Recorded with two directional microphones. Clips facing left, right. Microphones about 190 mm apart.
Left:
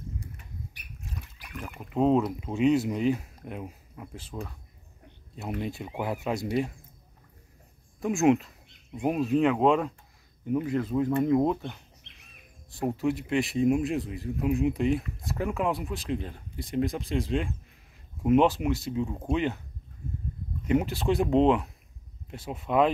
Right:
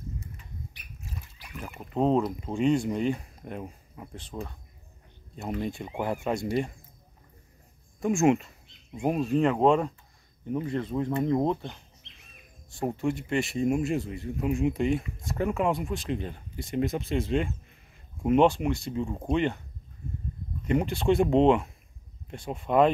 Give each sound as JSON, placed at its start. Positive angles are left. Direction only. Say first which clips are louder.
{"t": 1.5, "sound": "speech", "louder": "even", "side_deg": 0}
{"t": 8.0, "sound": "speech", "louder": "even", "side_deg": 0}
{"t": 12.0, "sound": "bird", "louder": "even", "side_deg": 55}
{"t": 12.7, "sound": "speech", "louder": "left 1 dB", "side_deg": 0}
{"t": 20.6, "sound": "speech", "louder": "right 1 dB", "side_deg": 5}